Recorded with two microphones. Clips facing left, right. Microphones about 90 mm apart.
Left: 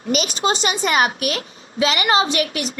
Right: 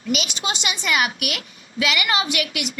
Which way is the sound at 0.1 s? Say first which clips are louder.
Left 6 dB; 40° left (ahead or behind).